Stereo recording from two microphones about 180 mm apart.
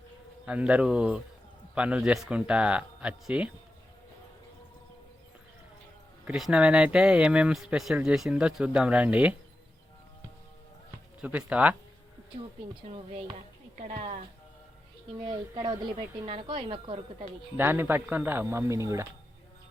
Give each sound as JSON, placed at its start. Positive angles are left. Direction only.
{"t": 0.4, "sound": "speech", "side_deg": -5}
{"t": 6.2, "sound": "speech", "side_deg": -5}
{"t": 11.2, "sound": "speech", "side_deg": -10}
{"t": 12.9, "sound": "speech", "side_deg": -35}
{"t": 13.7, "sound": "a woman's voice", "side_deg": -45}
{"t": 15.2, "sound": "a woman's voice", "side_deg": -25}
{"t": 17.6, "sound": "speech", "side_deg": -10}